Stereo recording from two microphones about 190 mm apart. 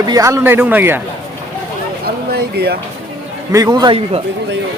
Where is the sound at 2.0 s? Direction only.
55° right (ahead or behind).